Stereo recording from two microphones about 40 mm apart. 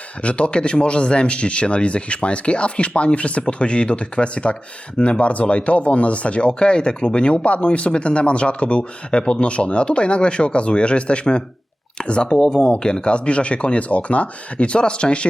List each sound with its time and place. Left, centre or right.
0.2 s speech: left